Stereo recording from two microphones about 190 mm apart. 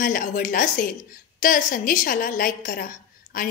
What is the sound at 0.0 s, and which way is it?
A woman's voice, 45° left (ahead or behind).